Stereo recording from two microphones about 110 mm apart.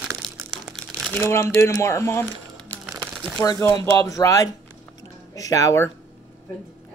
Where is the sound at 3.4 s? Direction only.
30° left (ahead or behind).